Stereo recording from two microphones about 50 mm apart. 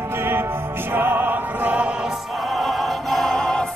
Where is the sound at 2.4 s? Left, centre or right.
Centre.